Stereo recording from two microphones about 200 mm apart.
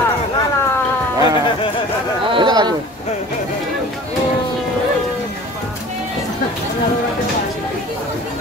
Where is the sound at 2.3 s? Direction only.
20° right (ahead or behind).